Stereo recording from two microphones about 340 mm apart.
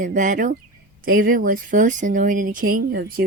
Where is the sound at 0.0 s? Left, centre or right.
Right.